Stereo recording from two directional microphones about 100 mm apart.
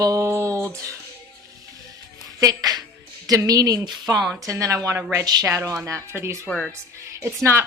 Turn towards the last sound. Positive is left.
turn(degrees=-25)  # may be behind; listen again after turning